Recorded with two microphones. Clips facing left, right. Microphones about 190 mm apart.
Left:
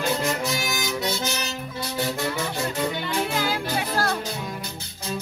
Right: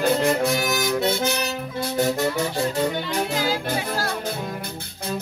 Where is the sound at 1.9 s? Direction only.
45° right (ahead or behind).